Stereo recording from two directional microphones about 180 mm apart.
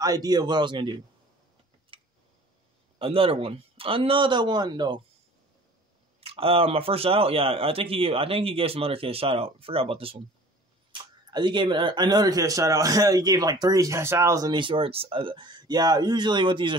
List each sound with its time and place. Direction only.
0.0 s speech: 20° right (ahead or behind)
1.9 s tick: 30° right (ahead or behind)
3.0 s speech: 30° right (ahead or behind)
6.2 s a man's voice: 30° right (ahead or behind)